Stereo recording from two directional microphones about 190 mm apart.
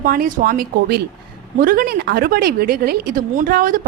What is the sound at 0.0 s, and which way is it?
A woman's voice, 50° right (ahead or behind).